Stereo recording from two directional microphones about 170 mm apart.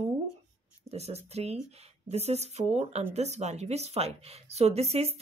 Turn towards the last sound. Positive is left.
turn(degrees=-40)  # may be behind; listen again after turning